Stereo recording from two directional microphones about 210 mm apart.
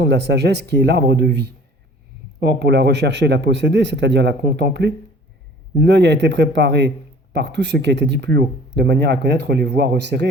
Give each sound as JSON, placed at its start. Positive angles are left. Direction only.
{"t": 0.0, "sound": "speech", "side_deg": -55}